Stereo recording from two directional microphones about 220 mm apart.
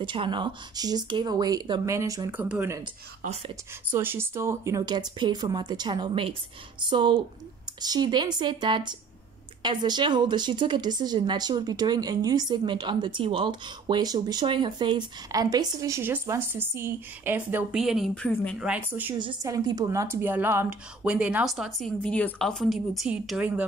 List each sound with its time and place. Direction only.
0.0 s a woman's voice: 20° right (ahead or behind)
3.2 s speech: 30° right (ahead or behind)
3.9 s speech: 10° right (ahead or behind); by 18.6 s 5° left (ahead or behind)
18.6 s a woman's voice: 5° right (ahead or behind)